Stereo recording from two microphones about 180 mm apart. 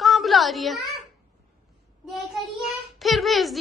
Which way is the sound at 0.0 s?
Centre (ahead or behind).